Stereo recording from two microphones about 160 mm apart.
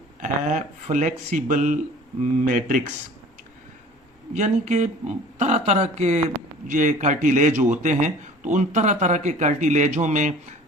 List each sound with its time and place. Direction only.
0.2 s speech: 45° right (ahead or behind)
4.4 s speech: 45° right (ahead or behind)